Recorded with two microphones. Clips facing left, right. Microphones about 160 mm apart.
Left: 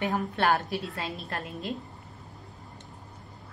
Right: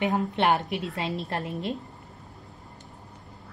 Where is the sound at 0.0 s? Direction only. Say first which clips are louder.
Right 3 dB; 20° right (ahead or behind).